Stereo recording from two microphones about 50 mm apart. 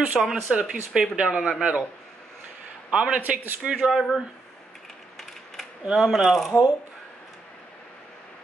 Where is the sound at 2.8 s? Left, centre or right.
Right.